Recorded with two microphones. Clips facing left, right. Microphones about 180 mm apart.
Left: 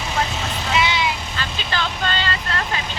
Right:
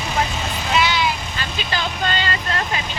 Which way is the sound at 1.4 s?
15° right (ahead or behind).